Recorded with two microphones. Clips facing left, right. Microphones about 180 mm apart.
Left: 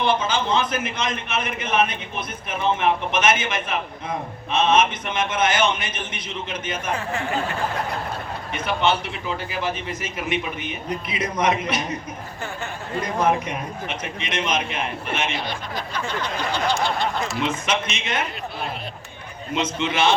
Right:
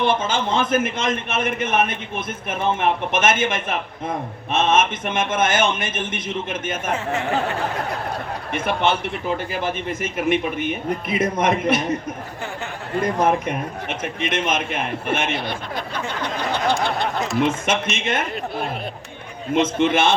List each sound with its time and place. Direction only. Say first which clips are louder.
0.0 s a man's voice: right 1 dB; 50° right (ahead or behind)
8.5 s a man's voice: right 1 dB; 50° right (ahead or behind)
13.0 s a man's voice: right 2 dB; 50° right (ahead or behind)
19.7 s a man's voice: even; 50° right (ahead or behind)